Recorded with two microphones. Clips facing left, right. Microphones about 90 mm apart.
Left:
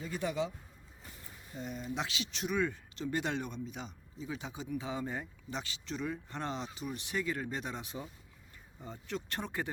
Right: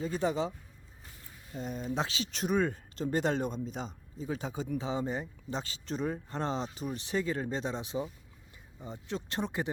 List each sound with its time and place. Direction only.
0.0 s speech: 30° right (ahead or behind)
1.5 s speech: 40° right (ahead or behind)
4.9 s speech: 25° right (ahead or behind)
5.5 s speech: 35° right (ahead or behind); by 9.7 s 20° right (ahead or behind)